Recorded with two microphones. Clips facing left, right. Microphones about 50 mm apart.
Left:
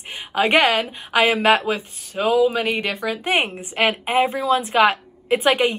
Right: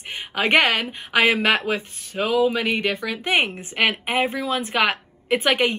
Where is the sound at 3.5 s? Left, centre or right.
Right.